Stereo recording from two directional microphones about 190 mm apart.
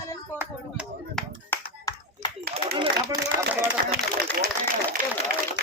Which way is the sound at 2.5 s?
30° right (ahead or behind).